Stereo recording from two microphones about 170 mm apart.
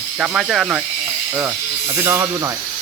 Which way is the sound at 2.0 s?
15° right (ahead or behind).